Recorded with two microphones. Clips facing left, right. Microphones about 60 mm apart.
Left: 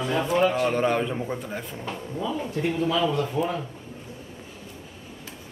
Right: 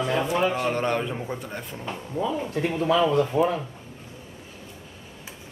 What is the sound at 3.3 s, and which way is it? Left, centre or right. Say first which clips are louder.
Speech: right 6 dB; right.